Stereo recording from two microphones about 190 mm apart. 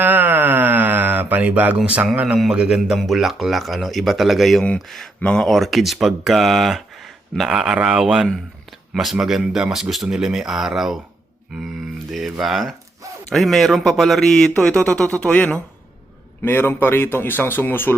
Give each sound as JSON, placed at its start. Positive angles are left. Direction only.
{"t": 0.0, "sound": "speech", "side_deg": -10}
{"t": 12.1, "sound": "a man's voice", "side_deg": 0}